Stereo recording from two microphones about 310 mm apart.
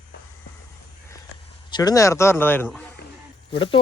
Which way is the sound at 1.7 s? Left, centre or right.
Centre.